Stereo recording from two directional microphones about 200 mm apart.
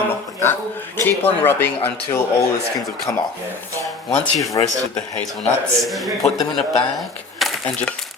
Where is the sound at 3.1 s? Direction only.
15° left (ahead or behind).